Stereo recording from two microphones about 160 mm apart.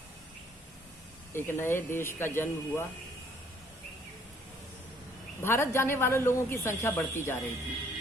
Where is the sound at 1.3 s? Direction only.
15° left (ahead or behind).